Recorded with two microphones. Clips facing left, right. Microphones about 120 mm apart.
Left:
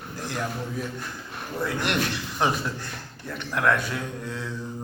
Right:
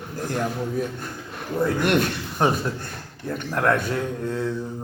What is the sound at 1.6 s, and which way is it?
Speech, 45° right (ahead or behind).